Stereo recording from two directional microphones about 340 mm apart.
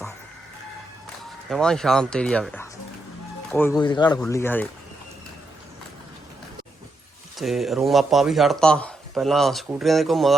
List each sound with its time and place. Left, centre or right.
1.5 s speech: centre
7.3 s speech: centre